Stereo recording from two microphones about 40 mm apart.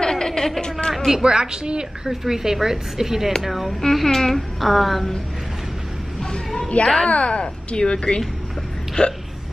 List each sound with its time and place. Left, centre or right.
0.0 s a sound: centre
1.1 s a woman's voice: centre
2.0 s a woman's voice: centre
3.9 s a woman's voice: centre
6.8 s a woman's voice: left